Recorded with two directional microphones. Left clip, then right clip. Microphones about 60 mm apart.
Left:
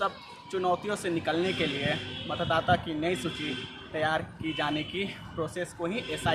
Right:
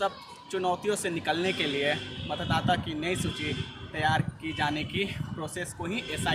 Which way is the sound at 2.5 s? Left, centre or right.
Left.